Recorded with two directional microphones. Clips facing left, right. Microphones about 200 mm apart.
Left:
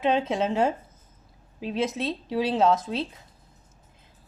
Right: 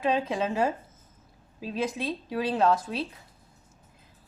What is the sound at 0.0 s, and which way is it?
Speech, 25° left (ahead or behind).